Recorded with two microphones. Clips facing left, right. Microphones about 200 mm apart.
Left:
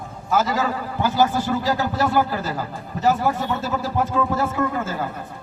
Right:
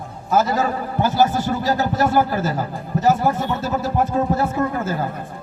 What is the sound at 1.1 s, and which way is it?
Speech, 40° right (ahead or behind).